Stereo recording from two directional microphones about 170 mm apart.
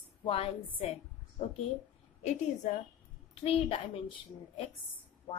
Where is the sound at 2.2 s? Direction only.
45° left (ahead or behind).